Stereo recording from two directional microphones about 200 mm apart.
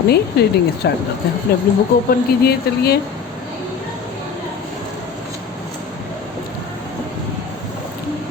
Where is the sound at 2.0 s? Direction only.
50° left (ahead or behind).